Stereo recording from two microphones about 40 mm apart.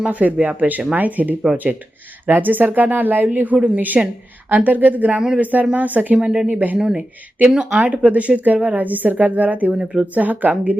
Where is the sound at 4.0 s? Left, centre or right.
Centre.